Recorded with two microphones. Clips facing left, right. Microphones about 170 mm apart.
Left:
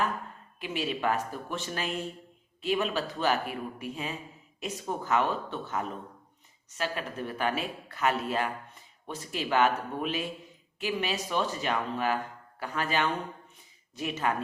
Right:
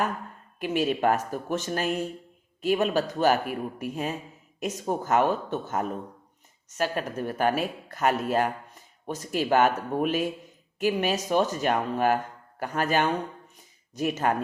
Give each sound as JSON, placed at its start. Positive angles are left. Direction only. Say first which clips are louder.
{"t": 0.6, "sound": "speech", "louder": "right 6 dB", "side_deg": -45}